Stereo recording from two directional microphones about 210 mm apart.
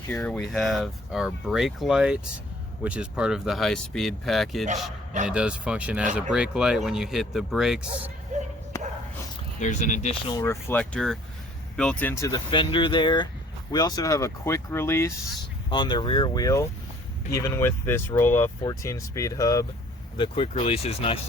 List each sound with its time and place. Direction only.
0.1 s speech: 5° left (ahead or behind)
4.6 s speech: 35° right (ahead or behind)
5.3 s speech: 5° right (ahead or behind)
8.3 s basketball bounce: 35° right (ahead or behind)
9.6 s speech: 35° left (ahead or behind)
10.2 s speech: 15° left (ahead or behind)